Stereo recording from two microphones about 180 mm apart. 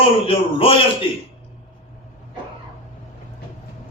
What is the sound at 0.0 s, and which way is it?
Speech, 30° left (ahead or behind).